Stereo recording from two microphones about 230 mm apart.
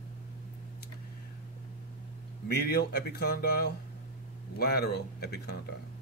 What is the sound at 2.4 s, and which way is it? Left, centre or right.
Speech, left.